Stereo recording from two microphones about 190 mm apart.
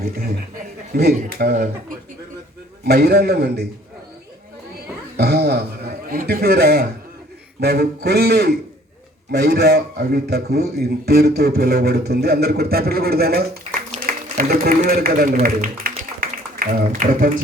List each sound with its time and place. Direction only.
1.1 s speech: 50° right (ahead or behind)
2.8 s a man's voice: 55° right (ahead or behind)
5.1 s a man's voice: 55° right (ahead or behind)
15.4 s a sound: 45° right (ahead or behind)